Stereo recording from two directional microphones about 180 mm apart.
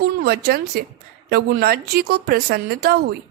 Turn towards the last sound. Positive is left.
turn(degrees=-60)  # may be behind; listen again after turning